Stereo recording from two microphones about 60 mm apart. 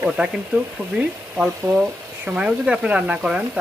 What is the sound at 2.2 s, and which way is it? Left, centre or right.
Speech, right.